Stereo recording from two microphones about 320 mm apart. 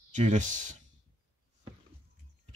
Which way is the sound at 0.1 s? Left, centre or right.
Right.